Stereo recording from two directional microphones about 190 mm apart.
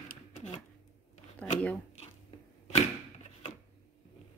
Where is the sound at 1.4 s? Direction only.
5° left (ahead or behind).